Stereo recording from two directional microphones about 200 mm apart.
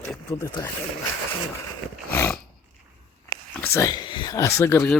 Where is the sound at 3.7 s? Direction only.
15° left (ahead or behind).